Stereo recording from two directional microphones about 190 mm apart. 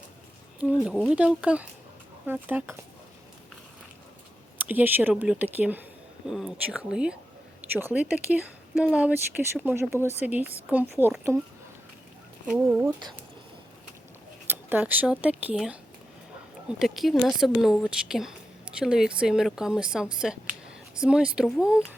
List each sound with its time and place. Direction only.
0.6 s speech: 5° right (ahead or behind)
4.6 s speech: 10° right (ahead or behind)
12.5 s speech: 10° right (ahead or behind)
14.4 s speech: 10° right (ahead or behind)